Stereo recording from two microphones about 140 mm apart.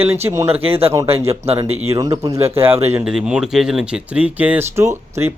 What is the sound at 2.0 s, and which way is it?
Speech, 25° right (ahead or behind).